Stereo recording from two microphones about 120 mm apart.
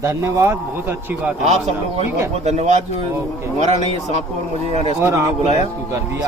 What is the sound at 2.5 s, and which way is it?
A man's voice, 65° right (ahead or behind).